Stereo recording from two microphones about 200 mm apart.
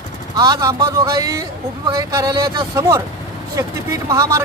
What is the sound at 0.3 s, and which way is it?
Speech, 20° right (ahead or behind).